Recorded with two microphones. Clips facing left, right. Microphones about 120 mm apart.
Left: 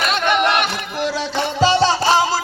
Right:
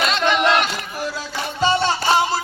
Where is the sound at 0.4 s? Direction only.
65° left (ahead or behind).